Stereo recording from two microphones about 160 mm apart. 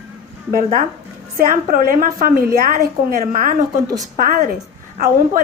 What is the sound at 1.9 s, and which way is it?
A woman's voice, 60° right (ahead or behind).